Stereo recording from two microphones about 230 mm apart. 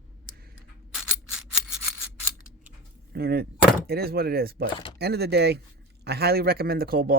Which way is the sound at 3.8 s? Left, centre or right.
Right.